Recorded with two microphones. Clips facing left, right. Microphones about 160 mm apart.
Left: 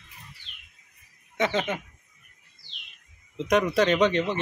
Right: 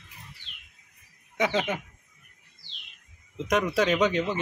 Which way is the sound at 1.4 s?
5° right (ahead or behind).